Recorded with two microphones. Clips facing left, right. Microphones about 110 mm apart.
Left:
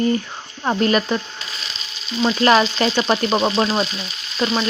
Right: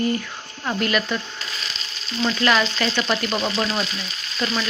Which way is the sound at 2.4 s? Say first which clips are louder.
Left 6 dB; 35° left (ahead or behind).